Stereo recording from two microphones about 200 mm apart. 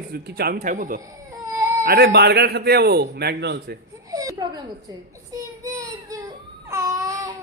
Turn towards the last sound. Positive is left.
turn(degrees=-15)  # may be behind; listen again after turning